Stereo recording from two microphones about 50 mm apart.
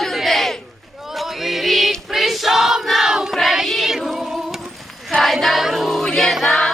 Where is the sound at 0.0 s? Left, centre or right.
Centre.